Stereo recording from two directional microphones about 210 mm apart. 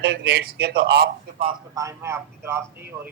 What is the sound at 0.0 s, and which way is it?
A man's voice, 50° right (ahead or behind).